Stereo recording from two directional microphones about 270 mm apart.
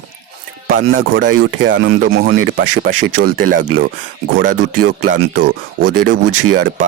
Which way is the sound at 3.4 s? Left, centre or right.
Right.